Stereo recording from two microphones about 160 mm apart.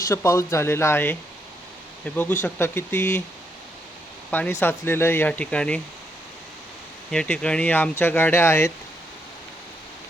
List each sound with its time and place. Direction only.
0.1 s speech: 20° left (ahead or behind)
4.3 s speech: 10° left (ahead or behind)
7.1 s speech: 5° left (ahead or behind)